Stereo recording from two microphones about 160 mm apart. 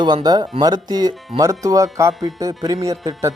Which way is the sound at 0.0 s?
25° right (ahead or behind).